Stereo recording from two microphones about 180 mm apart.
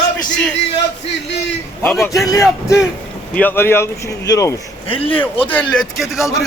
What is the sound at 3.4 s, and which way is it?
A man's voice, 10° left (ahead or behind).